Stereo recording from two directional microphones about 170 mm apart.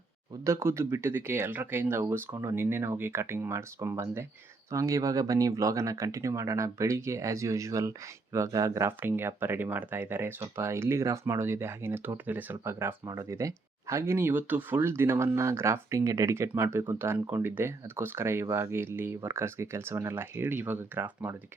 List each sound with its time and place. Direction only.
0.4 s speech: 15° right (ahead or behind)